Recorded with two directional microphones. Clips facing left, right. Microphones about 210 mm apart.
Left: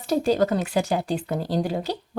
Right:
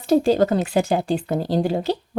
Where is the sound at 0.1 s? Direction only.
30° right (ahead or behind).